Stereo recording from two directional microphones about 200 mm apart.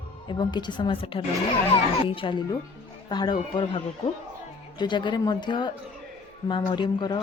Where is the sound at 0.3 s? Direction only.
20° left (ahead or behind).